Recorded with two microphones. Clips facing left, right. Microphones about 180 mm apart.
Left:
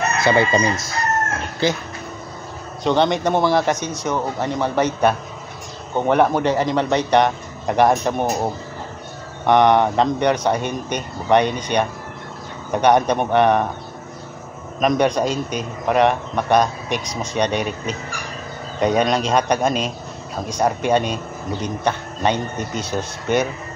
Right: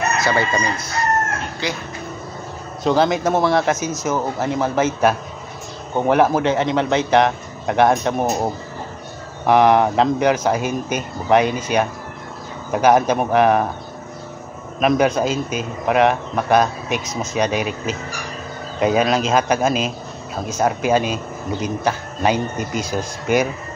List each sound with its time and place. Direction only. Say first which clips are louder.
0.3 s chicken: left 6 dB; 25° left (ahead or behind)
2.8 s a man's voice: right 1 dB; 5° right (ahead or behind)
9.5 s a man's voice: right 1 dB; 5° right (ahead or behind)
14.8 s a man's voice: right 1 dB; 5° right (ahead or behind)